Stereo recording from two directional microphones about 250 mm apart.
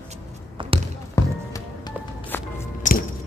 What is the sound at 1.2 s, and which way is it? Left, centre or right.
Music, centre.